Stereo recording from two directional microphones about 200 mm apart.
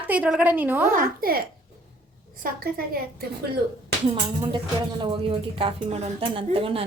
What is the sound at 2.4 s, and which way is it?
Speech, 50° right (ahead or behind).